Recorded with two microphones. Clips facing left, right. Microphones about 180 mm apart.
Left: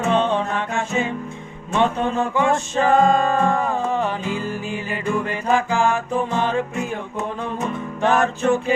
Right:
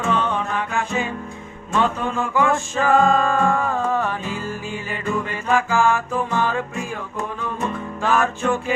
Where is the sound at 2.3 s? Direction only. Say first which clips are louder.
Left 1 dB; 20° left (ahead or behind).